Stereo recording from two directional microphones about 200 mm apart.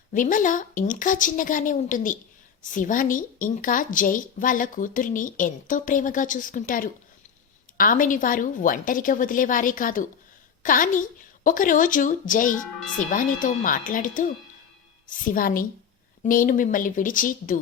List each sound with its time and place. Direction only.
0.1 s a woman's voice: 40° left (ahead or behind)